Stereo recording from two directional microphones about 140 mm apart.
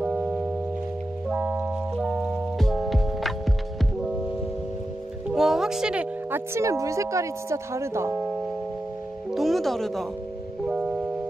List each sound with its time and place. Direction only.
0.0 s music: 10° right (ahead or behind)
5.3 s a woman's voice: 5° right (ahead or behind); by 8.2 s 20° right (ahead or behind)
9.3 s music: centre (ahead or behind)